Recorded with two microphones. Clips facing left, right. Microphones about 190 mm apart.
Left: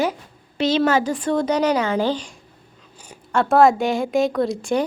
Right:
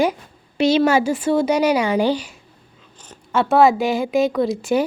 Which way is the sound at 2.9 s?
10° left (ahead or behind).